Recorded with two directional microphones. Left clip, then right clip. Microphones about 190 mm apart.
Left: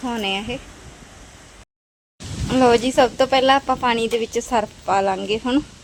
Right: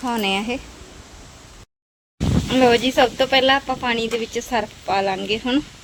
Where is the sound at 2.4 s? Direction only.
10° left (ahead or behind).